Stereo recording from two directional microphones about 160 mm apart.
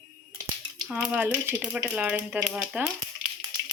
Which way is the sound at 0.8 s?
5° right (ahead or behind).